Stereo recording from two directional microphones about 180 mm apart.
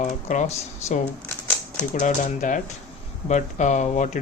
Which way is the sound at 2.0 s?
40° left (ahead or behind).